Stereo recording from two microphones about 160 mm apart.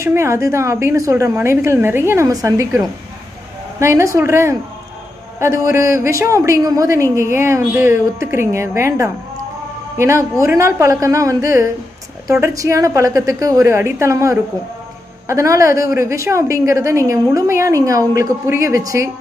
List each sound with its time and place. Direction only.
0.0 s a woman's voice: 15° right (ahead or behind)
3.8 s a woman's voice: 20° right (ahead or behind)